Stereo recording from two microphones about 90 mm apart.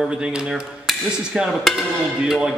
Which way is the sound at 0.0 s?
10° right (ahead or behind).